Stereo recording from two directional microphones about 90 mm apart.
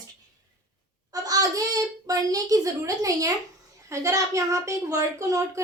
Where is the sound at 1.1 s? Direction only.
45° right (ahead or behind).